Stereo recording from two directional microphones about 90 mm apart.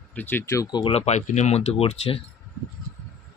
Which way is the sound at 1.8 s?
90° left.